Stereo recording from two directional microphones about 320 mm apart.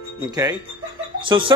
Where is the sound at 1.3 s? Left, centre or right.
Centre.